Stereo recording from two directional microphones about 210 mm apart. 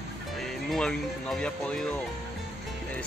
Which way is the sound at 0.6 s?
Centre (ahead or behind).